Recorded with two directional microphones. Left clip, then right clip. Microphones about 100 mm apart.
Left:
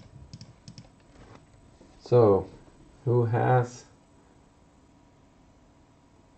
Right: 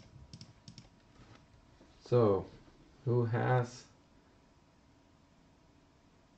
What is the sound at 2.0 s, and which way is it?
Speech, 30° left (ahead or behind).